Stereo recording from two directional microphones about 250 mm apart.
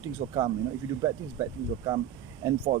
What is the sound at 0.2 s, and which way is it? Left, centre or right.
Speech, right.